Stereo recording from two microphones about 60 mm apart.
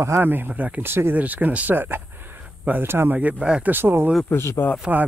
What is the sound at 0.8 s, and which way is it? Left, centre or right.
Speech, right.